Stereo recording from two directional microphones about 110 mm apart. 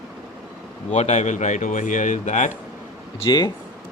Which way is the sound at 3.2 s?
40° left (ahead or behind).